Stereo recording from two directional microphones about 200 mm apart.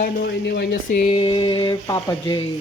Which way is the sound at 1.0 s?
30° left (ahead or behind).